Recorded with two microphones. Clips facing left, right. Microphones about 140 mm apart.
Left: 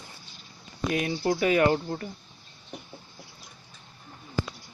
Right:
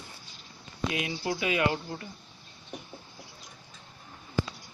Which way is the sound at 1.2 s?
40° left (ahead or behind).